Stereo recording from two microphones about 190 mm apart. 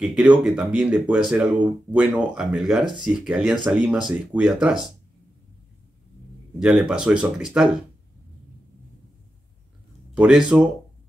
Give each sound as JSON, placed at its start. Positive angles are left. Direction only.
{"t": 0.0, "sound": "speech", "side_deg": -5}
{"t": 2.8, "sound": "speech", "side_deg": -25}
{"t": 3.1, "sound": "speech", "side_deg": -5}
{"t": 6.6, "sound": "speech", "side_deg": 0}
{"t": 10.1, "sound": "speech", "side_deg": -5}